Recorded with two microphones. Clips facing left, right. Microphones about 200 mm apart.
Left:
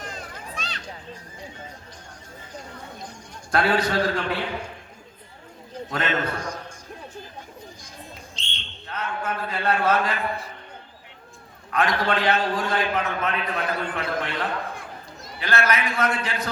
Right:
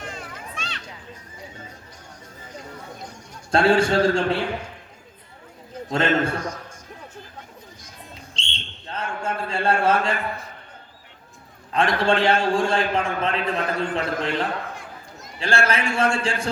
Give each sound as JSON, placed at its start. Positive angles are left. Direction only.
{"t": 0.0, "sound": "children playing", "side_deg": 40}
{"t": 3.5, "sound": "a man's voice", "side_deg": -25}
{"t": 5.9, "sound": "a man's voice", "side_deg": -25}
{"t": 8.4, "sound": "a sound", "side_deg": -30}
{"t": 11.7, "sound": "a man's voice", "side_deg": -30}